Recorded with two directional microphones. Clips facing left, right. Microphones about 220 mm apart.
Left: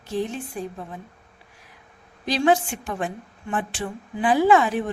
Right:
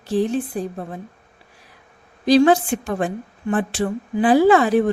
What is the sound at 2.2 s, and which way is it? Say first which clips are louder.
A woman's voice: right 7 dB; 35° right (ahead or behind).